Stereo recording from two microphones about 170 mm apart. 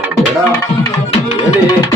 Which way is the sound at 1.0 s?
35° left (ahead or behind).